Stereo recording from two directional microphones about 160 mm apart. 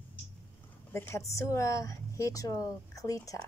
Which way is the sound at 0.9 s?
15° left (ahead or behind).